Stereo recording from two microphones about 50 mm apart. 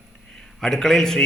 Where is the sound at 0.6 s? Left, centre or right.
Centre.